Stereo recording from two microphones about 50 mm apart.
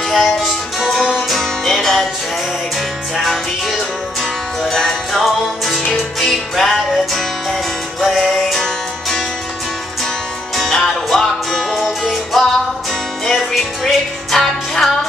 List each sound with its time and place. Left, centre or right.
0.1 s music: centre
3.2 s music: centre
4.7 s music: centre
10.5 s music: centre